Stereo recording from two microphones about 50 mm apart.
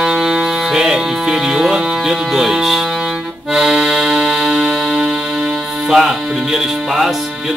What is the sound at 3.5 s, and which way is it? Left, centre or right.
Accordion, centre.